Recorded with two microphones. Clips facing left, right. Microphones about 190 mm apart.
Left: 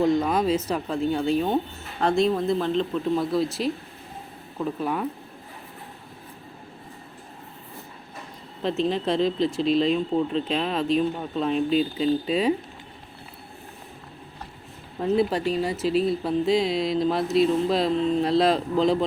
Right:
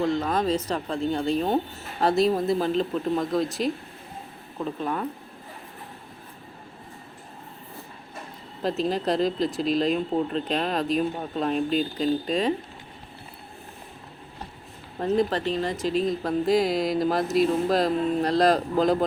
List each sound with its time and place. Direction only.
0.0 s speech: 15° left (ahead or behind)
0.3 s speech: 5° left (ahead or behind)
8.6 s speech: centre (ahead or behind)
15.0 s speech: 5° left (ahead or behind)